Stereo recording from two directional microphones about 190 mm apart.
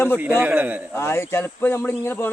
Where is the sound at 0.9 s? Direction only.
15° left (ahead or behind).